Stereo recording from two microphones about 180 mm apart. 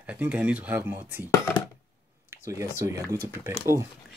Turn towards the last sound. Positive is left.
turn(degrees=-15)  # may be behind; listen again after turning